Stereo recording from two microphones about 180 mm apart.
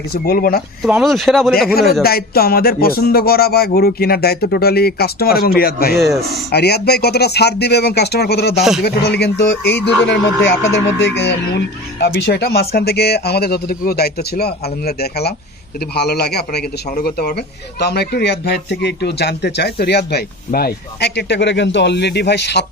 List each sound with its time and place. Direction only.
0.1 s speech: 55° left (ahead or behind)
0.8 s speech: centre (ahead or behind)
2.0 s speech: 55° left (ahead or behind)
5.9 s speech: centre (ahead or behind)
6.5 s speech: 65° left (ahead or behind); by 11.1 s 90° left
11.2 s speech: 70° left (ahead or behind)